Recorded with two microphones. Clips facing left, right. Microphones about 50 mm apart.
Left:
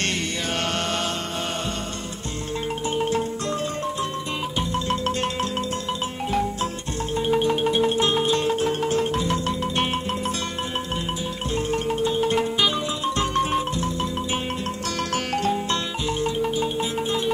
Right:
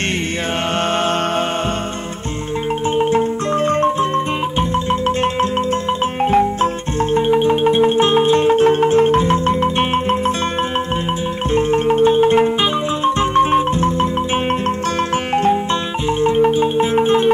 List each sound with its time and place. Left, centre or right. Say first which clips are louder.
3.0 s marimba: right 8 dB; right
3.6 s marimba: right 11 dB; right
4.6 s marimba: right 6 dB; right
6.2 s music: right 10 dB; right
7.2 s marimba: right 6 dB; right
11.5 s marimba: right 10 dB; right
13.0 s music: right 10 dB; right
15.3 s marimba: right 9 dB; right